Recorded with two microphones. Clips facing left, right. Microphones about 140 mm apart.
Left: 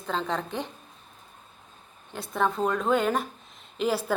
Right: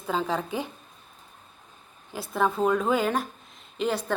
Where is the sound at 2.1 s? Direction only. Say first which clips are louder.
Right 1 dB; 5° right (ahead or behind).